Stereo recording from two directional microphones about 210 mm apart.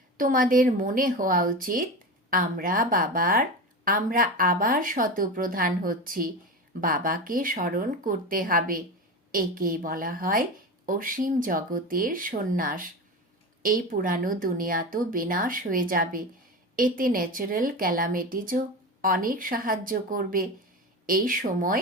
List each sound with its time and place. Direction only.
0.2 s speech: 40° right (ahead or behind)